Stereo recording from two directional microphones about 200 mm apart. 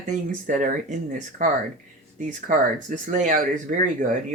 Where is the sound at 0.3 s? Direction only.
40° right (ahead or behind).